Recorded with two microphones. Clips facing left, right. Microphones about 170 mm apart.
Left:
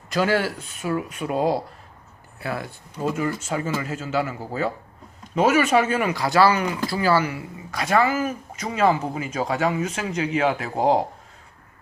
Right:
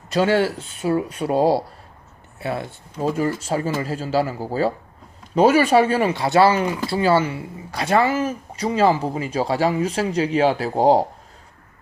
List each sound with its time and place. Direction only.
0.1 s speech: 25° right (ahead or behind)